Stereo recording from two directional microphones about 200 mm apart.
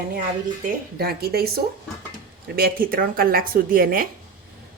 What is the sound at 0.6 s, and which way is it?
Speech, 50° right (ahead or behind).